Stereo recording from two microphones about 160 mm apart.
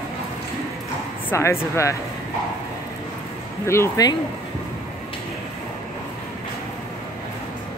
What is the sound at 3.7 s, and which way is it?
Speech, 20° left (ahead or behind).